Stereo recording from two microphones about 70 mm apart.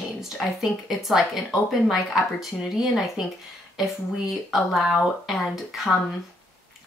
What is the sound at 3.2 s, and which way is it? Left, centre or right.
Speech, centre.